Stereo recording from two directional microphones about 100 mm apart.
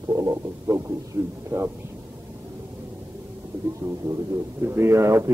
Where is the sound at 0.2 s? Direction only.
30° right (ahead or behind).